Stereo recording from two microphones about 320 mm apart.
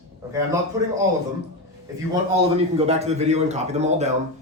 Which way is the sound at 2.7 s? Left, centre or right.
Centre.